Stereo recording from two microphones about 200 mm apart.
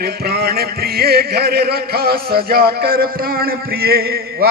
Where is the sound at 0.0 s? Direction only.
50° right (ahead or behind).